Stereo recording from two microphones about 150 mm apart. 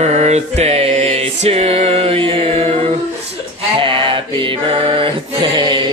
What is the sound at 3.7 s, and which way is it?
Mantra, 35° right (ahead or behind).